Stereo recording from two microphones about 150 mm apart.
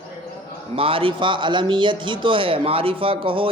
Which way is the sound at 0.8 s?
35° right (ahead or behind).